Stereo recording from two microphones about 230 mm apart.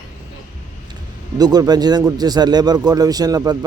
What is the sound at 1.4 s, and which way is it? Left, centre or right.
Speech, centre.